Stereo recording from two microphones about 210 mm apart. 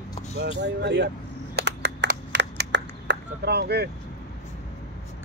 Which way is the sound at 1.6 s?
55° right (ahead or behind).